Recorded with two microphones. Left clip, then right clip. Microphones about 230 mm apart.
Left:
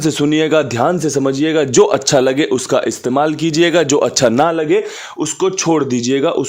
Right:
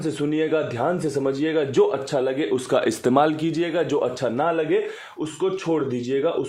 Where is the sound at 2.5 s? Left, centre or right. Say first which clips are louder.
Left 6 dB; left.